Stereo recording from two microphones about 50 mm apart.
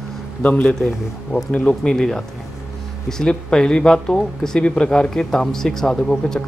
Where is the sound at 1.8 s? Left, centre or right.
Centre.